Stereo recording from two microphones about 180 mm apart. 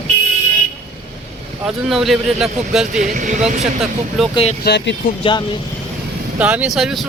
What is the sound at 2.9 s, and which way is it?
Speech, 45° right (ahead or behind).